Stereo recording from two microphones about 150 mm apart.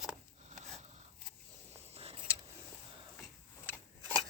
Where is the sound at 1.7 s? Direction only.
45° right (ahead or behind).